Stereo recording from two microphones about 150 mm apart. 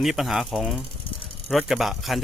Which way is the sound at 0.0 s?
Centre (ahead or behind).